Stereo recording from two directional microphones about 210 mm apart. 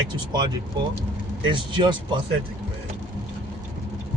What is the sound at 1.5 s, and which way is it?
Speech, 20° right (ahead or behind).